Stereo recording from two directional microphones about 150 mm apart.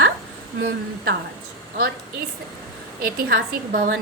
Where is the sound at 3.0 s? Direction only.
85° right.